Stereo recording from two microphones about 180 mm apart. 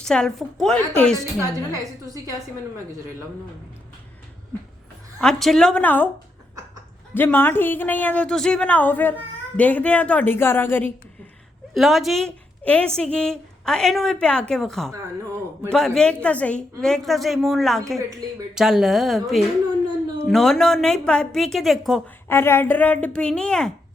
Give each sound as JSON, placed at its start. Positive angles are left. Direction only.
{"t": 0.0, "sound": "a woman's voice", "side_deg": 5}
{"t": 1.7, "sound": "a woman's voice", "side_deg": -20}
{"t": 5.2, "sound": "a woman's voice", "side_deg": 0}
{"t": 7.1, "sound": "speech", "side_deg": 10}
{"t": 11.7, "sound": "a woman's voice", "side_deg": 0}
{"t": 22.3, "sound": "speech", "side_deg": 15}